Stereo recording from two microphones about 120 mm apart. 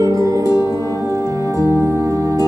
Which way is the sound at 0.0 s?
30° right (ahead or behind).